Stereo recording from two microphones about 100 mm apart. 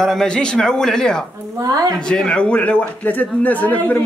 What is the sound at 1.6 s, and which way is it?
Speech, 35° right (ahead or behind).